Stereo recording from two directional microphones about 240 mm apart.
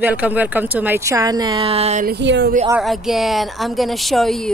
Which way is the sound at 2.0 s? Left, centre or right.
Right.